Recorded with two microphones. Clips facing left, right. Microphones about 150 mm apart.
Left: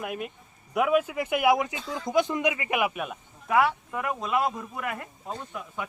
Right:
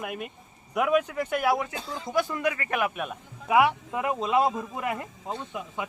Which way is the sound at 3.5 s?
15° right (ahead or behind).